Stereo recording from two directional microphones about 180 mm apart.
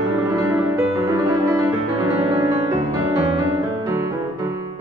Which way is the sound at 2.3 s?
15° right (ahead or behind).